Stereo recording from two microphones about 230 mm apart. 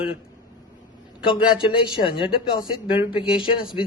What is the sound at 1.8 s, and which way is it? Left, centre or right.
Speech, left.